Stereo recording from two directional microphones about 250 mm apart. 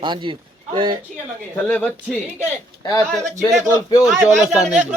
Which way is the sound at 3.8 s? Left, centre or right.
Centre.